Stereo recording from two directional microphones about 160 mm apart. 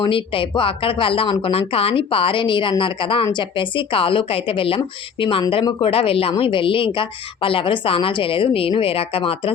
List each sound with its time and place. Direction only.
0.0 s a woman's voice: 30° left (ahead or behind)